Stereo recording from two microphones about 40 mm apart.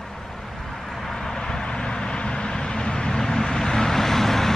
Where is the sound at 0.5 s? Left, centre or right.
Centre.